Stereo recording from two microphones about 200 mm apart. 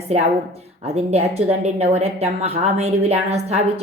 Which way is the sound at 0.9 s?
30° right (ahead or behind).